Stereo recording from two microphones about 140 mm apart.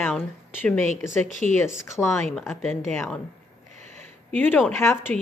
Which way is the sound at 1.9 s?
20° left (ahead or behind).